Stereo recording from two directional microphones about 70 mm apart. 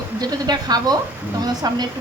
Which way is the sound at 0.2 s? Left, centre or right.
Right.